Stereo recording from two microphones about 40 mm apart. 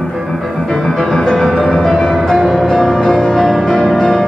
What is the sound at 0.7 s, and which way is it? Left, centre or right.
Music, centre.